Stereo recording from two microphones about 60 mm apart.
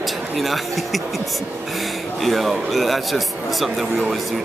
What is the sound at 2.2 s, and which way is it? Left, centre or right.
Speech, centre.